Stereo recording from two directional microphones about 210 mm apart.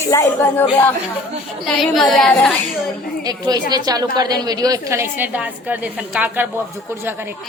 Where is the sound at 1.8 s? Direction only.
Centre (ahead or behind).